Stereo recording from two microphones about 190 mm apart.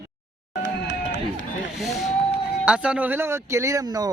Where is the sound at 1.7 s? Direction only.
Centre (ahead or behind).